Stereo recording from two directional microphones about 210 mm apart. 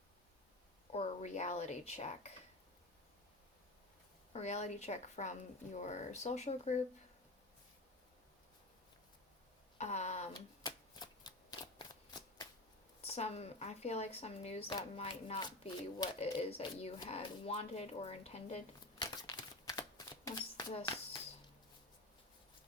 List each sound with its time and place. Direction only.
0.9 s a woman's voice: 35° left (ahead or behind)
4.3 s a woman's voice: 35° left (ahead or behind)
9.7 s a sound: 35° left (ahead or behind)
10.3 s shuffling cards: 20° left (ahead or behind)
13.0 s speech: 30° left (ahead or behind)